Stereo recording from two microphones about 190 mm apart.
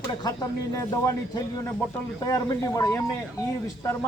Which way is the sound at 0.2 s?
20° left (ahead or behind).